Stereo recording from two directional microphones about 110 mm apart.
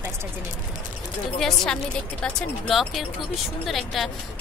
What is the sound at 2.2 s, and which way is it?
Speech, centre (ahead or behind).